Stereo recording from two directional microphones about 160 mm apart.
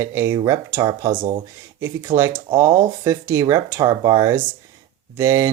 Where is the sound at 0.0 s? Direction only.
20° right (ahead or behind).